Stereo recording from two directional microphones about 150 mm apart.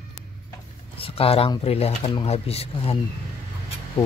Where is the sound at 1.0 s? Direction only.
40° left (ahead or behind).